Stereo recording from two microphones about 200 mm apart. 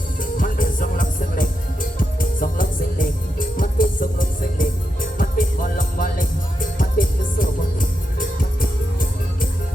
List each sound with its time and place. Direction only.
0.2 s music: 45° left (ahead or behind)